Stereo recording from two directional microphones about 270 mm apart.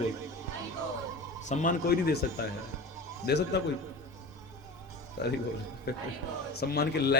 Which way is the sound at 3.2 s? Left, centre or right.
Left.